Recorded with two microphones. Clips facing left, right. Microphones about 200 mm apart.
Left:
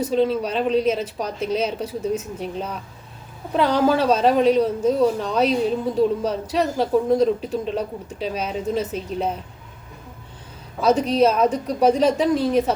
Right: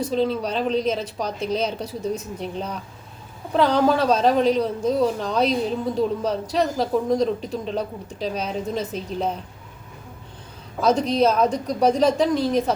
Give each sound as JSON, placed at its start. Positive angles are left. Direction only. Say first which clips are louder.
{"t": 0.0, "sound": "a man's voice", "louder": "left 2 dB", "side_deg": 5}
{"t": 10.8, "sound": "a man's voice", "louder": "left 2 dB", "side_deg": 5}